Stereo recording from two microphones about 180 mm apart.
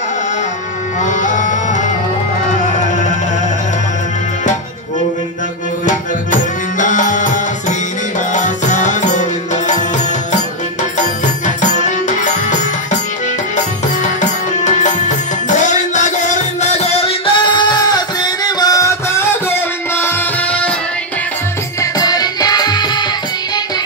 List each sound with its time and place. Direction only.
1.0 s music: 45° left (ahead or behind)
5.9 s music: 45° left (ahead or behind)
14.6 s music: 40° left (ahead or behind); by 20.7 s 5° left (ahead or behind)
21.9 s music: 20° left (ahead or behind)